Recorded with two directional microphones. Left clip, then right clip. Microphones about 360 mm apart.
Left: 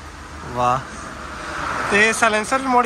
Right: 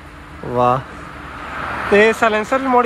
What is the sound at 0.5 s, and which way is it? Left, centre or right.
Speech, centre.